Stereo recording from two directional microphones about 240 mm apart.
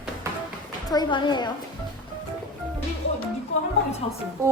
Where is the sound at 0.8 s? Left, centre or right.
Centre.